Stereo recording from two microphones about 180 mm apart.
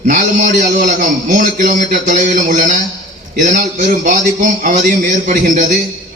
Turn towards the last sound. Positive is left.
turn(degrees=-45)  # may be behind; listen again after turning